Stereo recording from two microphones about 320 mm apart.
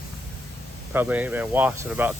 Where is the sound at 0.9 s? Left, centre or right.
Centre.